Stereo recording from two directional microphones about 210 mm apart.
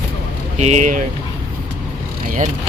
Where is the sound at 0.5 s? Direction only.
35° right (ahead or behind).